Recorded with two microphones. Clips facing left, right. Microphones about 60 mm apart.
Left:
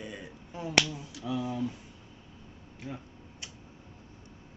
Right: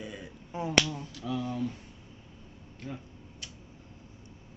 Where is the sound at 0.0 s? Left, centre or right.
Centre.